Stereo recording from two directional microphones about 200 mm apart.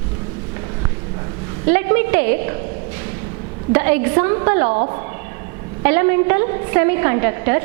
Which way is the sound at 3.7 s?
15° right (ahead or behind).